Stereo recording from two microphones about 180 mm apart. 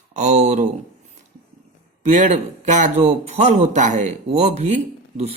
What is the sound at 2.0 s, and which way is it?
Speech, 45° right (ahead or behind).